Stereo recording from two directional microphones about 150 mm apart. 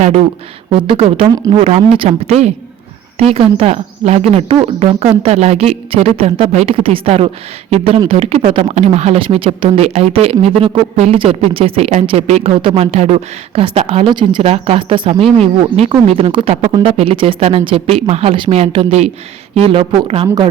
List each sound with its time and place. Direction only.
0.0 s a woman's voice: 45° right (ahead or behind); by 20.5 s 30° right (ahead or behind)